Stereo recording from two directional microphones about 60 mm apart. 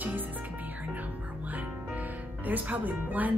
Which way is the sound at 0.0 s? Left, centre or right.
Right.